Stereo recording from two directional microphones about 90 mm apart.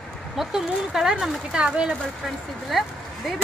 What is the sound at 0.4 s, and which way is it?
Speech, 5° right (ahead or behind).